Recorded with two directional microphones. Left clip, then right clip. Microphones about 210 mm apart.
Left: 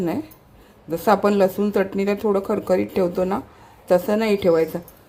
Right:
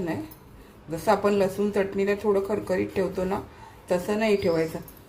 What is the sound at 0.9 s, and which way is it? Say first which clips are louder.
Speech: left 5 dB; 40° left (ahead or behind).